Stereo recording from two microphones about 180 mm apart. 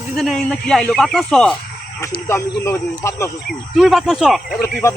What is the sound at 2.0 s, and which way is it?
Speech, 15° left (ahead or behind).